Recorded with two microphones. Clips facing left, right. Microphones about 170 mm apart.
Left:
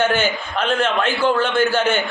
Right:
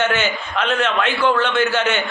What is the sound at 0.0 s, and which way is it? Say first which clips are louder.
Speech: left 1 dB; 10° left (ahead or behind).